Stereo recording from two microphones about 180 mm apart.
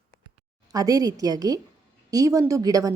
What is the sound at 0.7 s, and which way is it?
A woman's voice, 20° right (ahead or behind).